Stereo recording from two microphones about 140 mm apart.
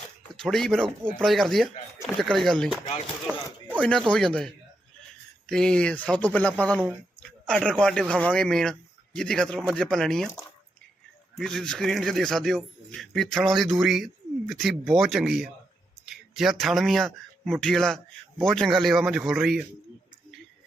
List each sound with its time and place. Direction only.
0.3 s a man's voice: 5° left (ahead or behind)
3.2 s speech: 10° right (ahead or behind)
4.1 s a man's voice: 5° left (ahead or behind)